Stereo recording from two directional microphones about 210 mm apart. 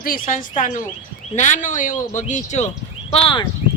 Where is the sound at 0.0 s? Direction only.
40° left (ahead or behind).